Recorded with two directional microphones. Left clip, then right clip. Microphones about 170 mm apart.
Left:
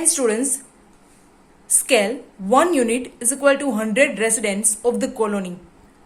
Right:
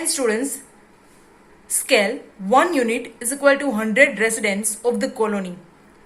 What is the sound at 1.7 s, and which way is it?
A woman's voice, 30° left (ahead or behind).